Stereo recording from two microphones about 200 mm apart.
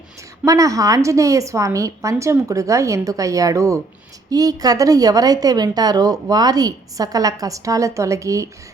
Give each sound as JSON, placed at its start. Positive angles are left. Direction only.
{"t": 0.4, "sound": "a woman's voice", "side_deg": -15}